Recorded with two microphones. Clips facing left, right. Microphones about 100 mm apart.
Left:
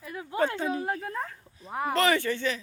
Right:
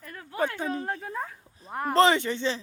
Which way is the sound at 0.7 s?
10° left (ahead or behind).